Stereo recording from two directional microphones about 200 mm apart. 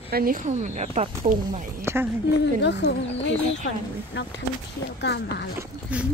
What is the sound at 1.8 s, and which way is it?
Speech, 10° right (ahead or behind).